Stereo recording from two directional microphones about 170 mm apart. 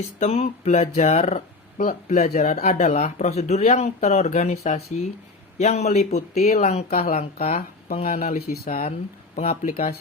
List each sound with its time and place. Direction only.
0.2 s speech: 40° left (ahead or behind)
8.4 s speech: 60° left (ahead or behind)